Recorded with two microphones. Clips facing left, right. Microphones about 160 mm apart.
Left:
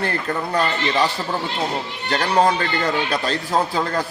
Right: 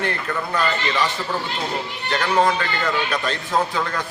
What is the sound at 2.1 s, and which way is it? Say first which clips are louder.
A man's voice: left 1 dB; 35° left (ahead or behind).